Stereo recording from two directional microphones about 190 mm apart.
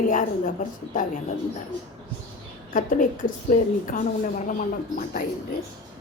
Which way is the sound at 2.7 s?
45° left (ahead or behind).